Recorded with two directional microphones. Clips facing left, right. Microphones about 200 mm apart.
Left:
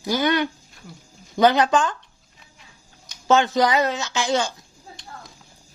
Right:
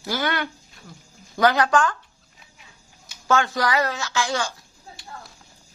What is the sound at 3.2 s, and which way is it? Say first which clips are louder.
Speech: left 4 dB; 20° left (ahead or behind).